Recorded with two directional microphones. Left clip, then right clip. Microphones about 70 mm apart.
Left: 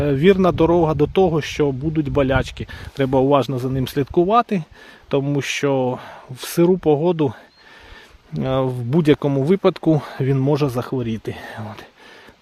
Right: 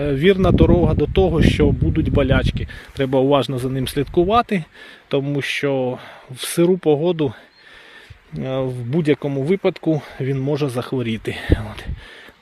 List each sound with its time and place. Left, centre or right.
0.0 s speech: left
0.8 s speech: left
1.3 s speech: centre
2.0 s speech: left
3.1 s speech: centre
4.3 s speech: centre
5.2 s speech: left; by 7.0 s centre
7.0 s speech: left
8.3 s speech: left
10.9 s speech: centre